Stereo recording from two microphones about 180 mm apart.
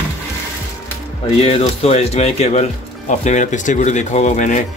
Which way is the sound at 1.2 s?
35° left (ahead or behind).